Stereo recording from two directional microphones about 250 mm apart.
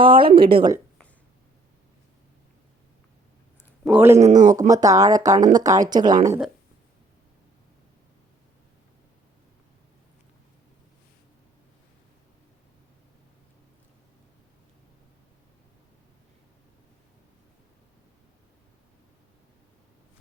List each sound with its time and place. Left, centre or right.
0.0 s a woman's voice: centre
3.8 s speech: centre
4.2 s speech: right
4.7 s speech: centre